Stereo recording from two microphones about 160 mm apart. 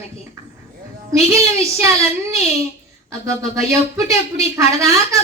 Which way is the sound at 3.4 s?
20° right (ahead or behind).